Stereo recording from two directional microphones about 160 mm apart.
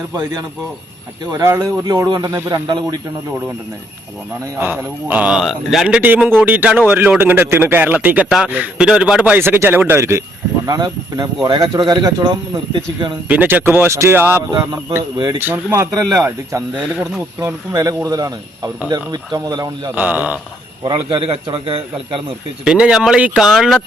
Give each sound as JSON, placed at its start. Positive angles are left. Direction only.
{"t": 1.3, "sound": "a man's voice", "side_deg": -20}
{"t": 4.6, "sound": "a man's voice", "side_deg": -10}
{"t": 13.2, "sound": "a man's voice", "side_deg": -10}
{"t": 14.5, "sound": "a man's voice", "side_deg": -25}
{"t": 15.4, "sound": "a man's voice", "side_deg": -15}
{"t": 20.0, "sound": "a man's voice", "side_deg": -10}
{"t": 20.8, "sound": "a man's voice", "side_deg": -30}
{"t": 22.6, "sound": "speech", "side_deg": -5}